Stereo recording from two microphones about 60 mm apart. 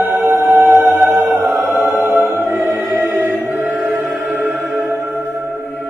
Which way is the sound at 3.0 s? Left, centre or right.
Right.